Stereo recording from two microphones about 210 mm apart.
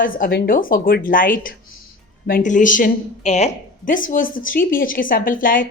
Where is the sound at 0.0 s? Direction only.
40° left (ahead or behind).